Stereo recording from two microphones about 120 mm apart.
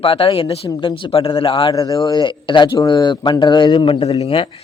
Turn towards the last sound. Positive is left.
turn(degrees=55)  # may be behind; listen again after turning